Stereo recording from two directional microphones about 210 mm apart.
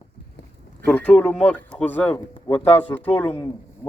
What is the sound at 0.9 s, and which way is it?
Speech, 10° left (ahead or behind).